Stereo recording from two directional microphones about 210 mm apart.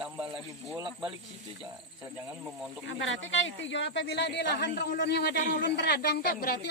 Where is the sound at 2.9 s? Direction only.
60° left (ahead or behind).